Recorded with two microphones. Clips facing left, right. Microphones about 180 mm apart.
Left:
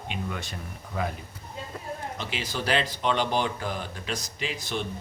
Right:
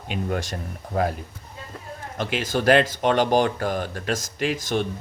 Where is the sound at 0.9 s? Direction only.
55° right (ahead or behind).